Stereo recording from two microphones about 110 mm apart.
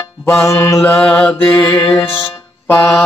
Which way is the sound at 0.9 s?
10° left (ahead or behind).